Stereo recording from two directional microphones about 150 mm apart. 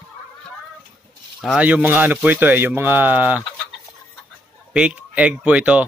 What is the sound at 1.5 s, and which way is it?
Speech, 10° right (ahead or behind).